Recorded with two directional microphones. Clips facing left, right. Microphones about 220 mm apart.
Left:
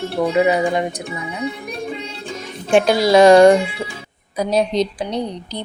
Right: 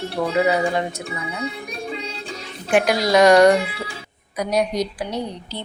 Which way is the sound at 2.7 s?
25° left (ahead or behind).